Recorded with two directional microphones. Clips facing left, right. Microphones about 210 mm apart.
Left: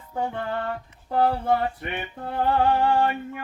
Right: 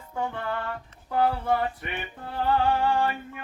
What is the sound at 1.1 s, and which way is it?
Speech, 45° left (ahead or behind).